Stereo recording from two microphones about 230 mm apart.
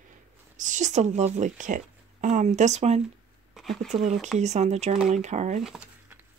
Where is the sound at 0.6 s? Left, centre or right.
Right.